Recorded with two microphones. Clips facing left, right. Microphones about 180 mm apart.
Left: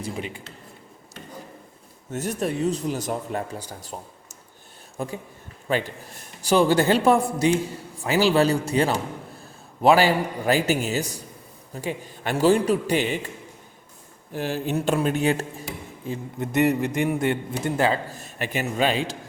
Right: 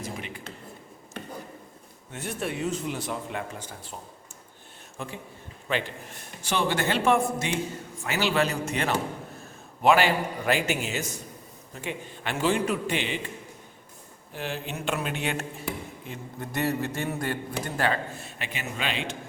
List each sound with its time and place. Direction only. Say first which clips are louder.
2.0 s speech: left 6 dB; 40° left (ahead or behind)
14.3 s speech: left 8 dB; 40° left (ahead or behind)
16.4 s a man's voice: left 7 dB; 20° left (ahead or behind); by 19.1 s 40° left (ahead or behind)